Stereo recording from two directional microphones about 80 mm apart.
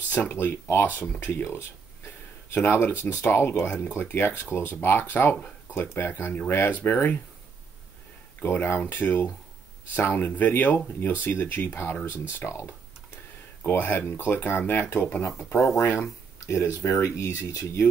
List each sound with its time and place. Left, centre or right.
0.1 s speech: left
3.6 s speech: centre
8.4 s speech: left
15.2 s speech: left